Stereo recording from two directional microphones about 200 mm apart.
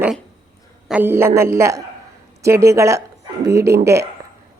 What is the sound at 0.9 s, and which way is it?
A man's voice, 10° right (ahead or behind).